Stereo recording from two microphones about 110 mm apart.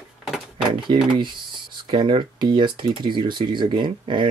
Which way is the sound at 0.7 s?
45° right (ahead or behind).